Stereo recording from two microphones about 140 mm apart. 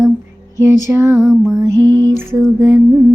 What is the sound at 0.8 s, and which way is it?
Speech, 15° right (ahead or behind).